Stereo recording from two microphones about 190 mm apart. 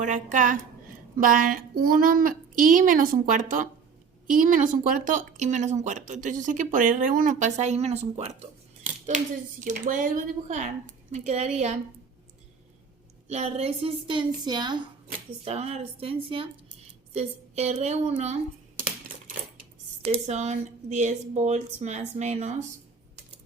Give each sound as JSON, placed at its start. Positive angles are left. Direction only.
{"t": 0.0, "sound": "speech", "side_deg": -40}
{"t": 13.2, "sound": "speech", "side_deg": -35}
{"t": 15.4, "sound": "speech", "side_deg": -35}
{"t": 20.1, "sound": "speech", "side_deg": -35}